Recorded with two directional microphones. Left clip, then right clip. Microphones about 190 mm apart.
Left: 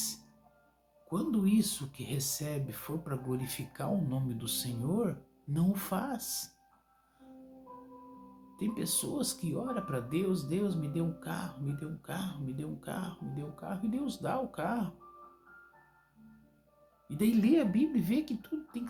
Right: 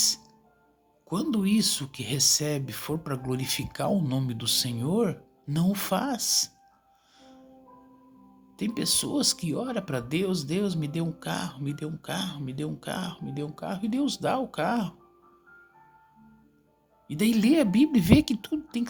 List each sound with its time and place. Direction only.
1.1 s speech: 55° right (ahead or behind)
8.5 s speech: 55° right (ahead or behind)
17.1 s speech: 60° right (ahead or behind)